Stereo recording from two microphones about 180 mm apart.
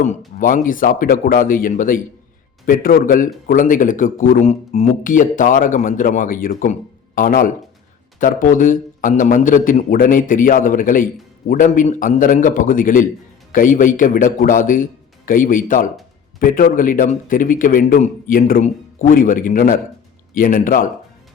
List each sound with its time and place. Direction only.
0.3 s a man's voice: 45° left (ahead or behind)